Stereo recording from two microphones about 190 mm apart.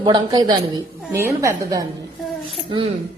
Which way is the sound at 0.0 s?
20° right (ahead or behind).